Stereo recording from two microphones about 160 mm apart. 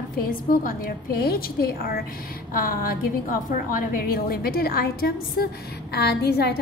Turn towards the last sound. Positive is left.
turn(degrees=85)